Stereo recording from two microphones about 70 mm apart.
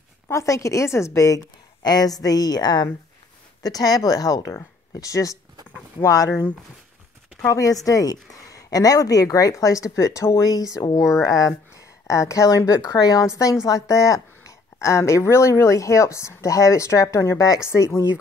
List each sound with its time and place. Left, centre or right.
0.3 s a woman's voice: left
3.6 s a woman's voice: left
4.9 s a woman's voice: left
7.4 s a woman's voice: left